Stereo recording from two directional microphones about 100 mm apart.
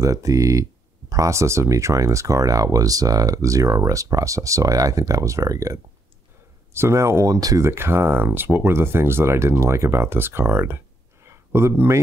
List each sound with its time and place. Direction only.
0.0 s speech: 35° right (ahead or behind)
7.7 s speech: 25° right (ahead or behind)